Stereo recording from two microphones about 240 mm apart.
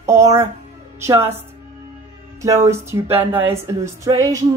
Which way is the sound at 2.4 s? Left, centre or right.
Centre.